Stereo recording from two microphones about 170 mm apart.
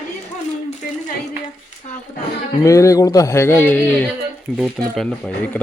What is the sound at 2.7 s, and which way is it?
Speech, 20° left (ahead or behind).